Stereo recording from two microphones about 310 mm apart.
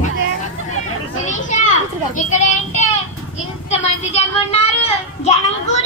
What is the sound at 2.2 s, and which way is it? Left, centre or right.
Child singing, left.